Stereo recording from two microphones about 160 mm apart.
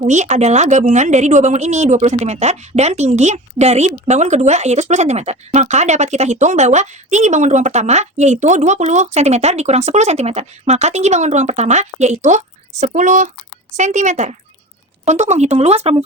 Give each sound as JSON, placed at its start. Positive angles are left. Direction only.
{"t": 0.0, "sound": "speech", "side_deg": -45}